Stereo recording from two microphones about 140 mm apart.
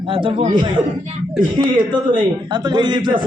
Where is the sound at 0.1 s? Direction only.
40° right (ahead or behind).